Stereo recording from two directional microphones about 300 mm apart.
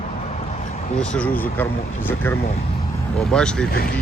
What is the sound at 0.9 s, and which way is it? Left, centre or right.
Speech, centre.